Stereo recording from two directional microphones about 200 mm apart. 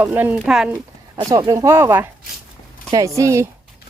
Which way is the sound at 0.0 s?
10° right (ahead or behind).